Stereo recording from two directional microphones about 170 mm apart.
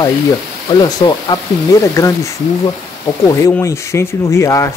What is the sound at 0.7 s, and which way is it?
Speech, 25° left (ahead or behind).